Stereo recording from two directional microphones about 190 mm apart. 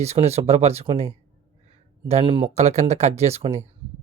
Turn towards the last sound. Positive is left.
turn(degrees=-35)  # may be behind; listen again after turning